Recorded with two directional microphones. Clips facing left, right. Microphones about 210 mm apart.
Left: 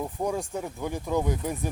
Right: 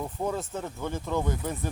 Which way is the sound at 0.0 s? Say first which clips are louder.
Left 2 dB; 15° left (ahead or behind).